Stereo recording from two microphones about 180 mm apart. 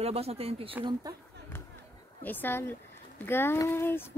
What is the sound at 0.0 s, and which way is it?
Speech, 35° right (ahead or behind).